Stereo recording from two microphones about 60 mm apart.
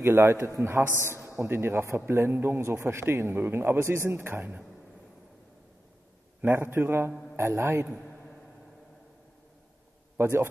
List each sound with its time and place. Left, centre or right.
0.0 s a man's voice: right
2.7 s a man's voice: right
6.4 s a man's voice: right
10.1 s a man's voice: right